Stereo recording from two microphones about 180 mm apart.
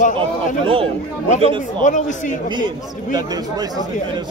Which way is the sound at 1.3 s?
40° left (ahead or behind).